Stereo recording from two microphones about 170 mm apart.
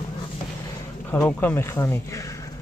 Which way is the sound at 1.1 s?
10° left (ahead or behind).